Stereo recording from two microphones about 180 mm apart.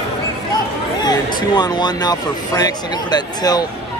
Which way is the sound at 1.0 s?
20° left (ahead or behind).